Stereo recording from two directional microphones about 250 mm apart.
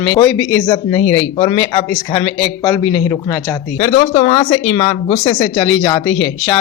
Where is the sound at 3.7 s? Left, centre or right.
Left.